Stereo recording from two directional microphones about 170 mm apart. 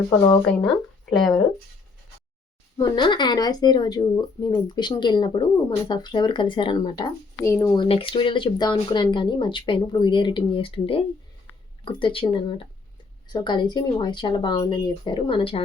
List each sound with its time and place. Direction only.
1.1 s speech: centre (ahead or behind)
2.7 s speech: 25° left (ahead or behind)
7.8 s speech: 35° left (ahead or behind)